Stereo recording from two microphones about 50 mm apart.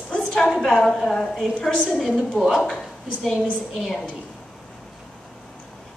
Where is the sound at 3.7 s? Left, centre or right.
Centre.